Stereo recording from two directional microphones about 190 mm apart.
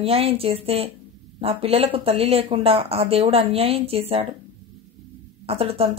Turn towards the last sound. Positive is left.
turn(degrees=-30)  # may be behind; listen again after turning